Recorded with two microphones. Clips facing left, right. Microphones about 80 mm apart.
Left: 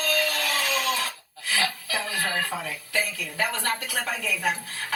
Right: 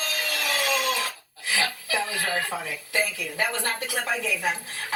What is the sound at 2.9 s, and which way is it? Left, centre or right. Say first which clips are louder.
A woman's voice: right 2 dB; right.